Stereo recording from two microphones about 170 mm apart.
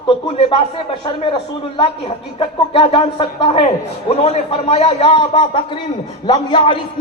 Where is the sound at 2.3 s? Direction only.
30° left (ahead or behind).